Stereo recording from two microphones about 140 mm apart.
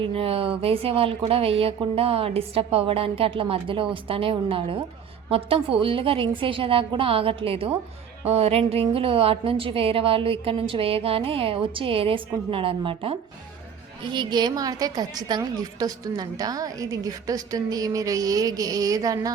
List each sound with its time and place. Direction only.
0.0 s a woman's voice: 40° right (ahead or behind); by 19.3 s 25° right (ahead or behind)